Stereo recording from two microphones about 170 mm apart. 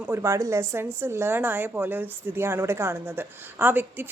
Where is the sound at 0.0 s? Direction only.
15° right (ahead or behind).